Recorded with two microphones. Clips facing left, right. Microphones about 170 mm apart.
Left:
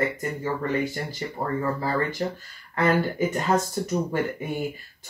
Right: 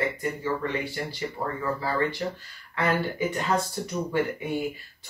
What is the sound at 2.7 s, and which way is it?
Speech, 45° left (ahead or behind).